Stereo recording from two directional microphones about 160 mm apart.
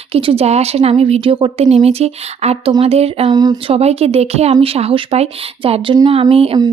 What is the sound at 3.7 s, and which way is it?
A woman's voice, 40° right (ahead or behind).